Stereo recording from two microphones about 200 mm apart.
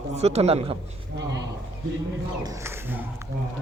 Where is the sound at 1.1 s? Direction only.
60° right (ahead or behind).